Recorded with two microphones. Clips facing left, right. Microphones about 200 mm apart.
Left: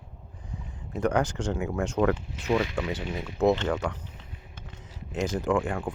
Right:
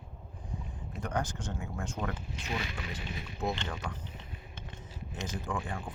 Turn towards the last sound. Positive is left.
turn(degrees=75)  # may be behind; listen again after turning